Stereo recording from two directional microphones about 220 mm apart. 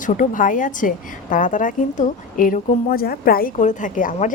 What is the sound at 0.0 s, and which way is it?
A woman's voice, 35° left (ahead or behind).